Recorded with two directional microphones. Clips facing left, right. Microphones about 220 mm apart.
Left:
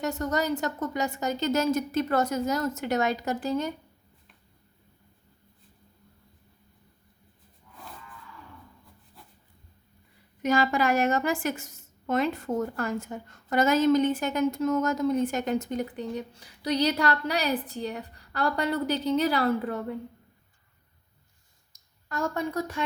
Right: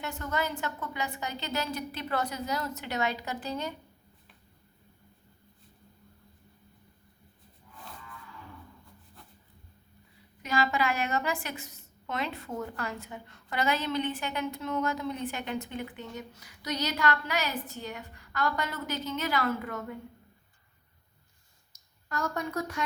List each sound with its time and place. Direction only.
0.0 s a woman's voice: 40° left (ahead or behind)
10.4 s a woman's voice: 45° left (ahead or behind)